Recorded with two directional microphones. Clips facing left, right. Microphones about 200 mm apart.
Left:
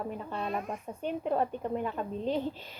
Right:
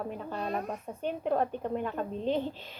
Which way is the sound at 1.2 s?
5° left (ahead or behind).